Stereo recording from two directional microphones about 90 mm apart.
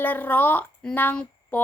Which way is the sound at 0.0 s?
20° left (ahead or behind).